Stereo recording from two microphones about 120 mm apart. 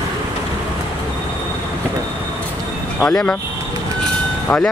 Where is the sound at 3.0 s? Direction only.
5° left (ahead or behind).